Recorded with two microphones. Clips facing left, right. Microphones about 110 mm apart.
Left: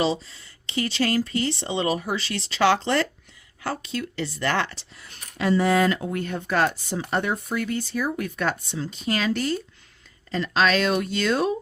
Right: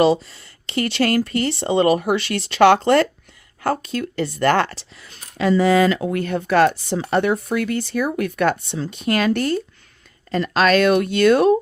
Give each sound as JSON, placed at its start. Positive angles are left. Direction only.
{"t": 0.0, "sound": "speech", "side_deg": -60}
{"t": 4.9, "sound": "speech", "side_deg": -90}